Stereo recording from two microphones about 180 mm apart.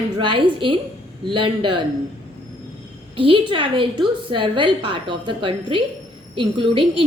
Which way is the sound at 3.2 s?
30° right (ahead or behind).